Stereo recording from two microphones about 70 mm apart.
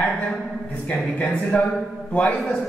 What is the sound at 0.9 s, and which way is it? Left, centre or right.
A man's voice, left.